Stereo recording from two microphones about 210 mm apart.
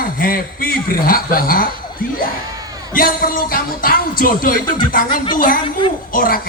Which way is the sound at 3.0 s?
40° left (ahead or behind).